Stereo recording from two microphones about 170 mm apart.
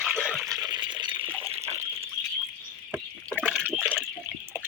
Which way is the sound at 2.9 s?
5° left (ahead or behind).